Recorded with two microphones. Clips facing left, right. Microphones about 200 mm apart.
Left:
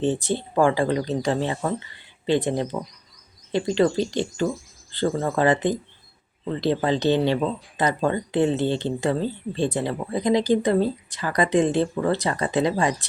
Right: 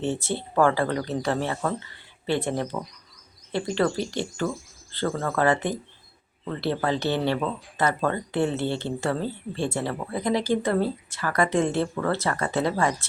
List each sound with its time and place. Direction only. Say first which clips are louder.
0.0 s speech: left 4 dB; 15° left (ahead or behind)